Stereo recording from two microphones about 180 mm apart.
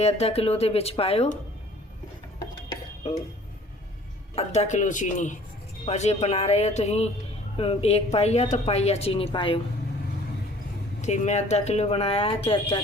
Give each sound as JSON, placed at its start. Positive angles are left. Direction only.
{"t": 0.0, "sound": "speech", "side_deg": 35}
{"t": 4.4, "sound": "speech", "side_deg": 40}
{"t": 11.0, "sound": "speech", "side_deg": 40}